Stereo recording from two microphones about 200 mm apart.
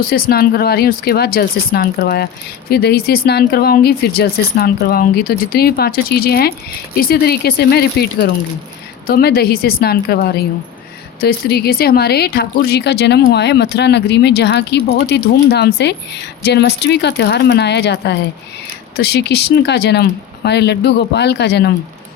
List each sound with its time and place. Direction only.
0.0 s speech: 45° left (ahead or behind)